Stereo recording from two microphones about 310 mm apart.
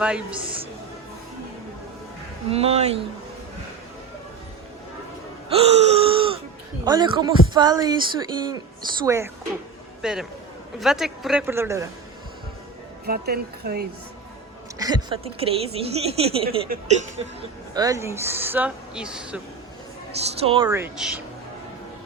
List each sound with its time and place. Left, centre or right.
0.0 s a man's voice: centre
2.5 s a woman's voice: centre
5.5 s gasp: centre
6.8 s a man's voice: centre
13.1 s speech: right
14.8 s a woman's voice: centre
17.7 s speech: centre
20.1 s speech: centre